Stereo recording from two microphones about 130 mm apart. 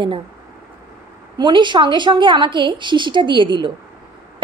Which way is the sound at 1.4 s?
35° right (ahead or behind).